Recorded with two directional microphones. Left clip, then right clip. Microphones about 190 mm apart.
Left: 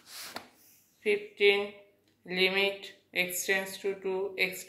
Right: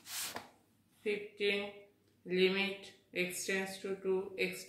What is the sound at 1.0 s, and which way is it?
Speech, 15° left (ahead or behind).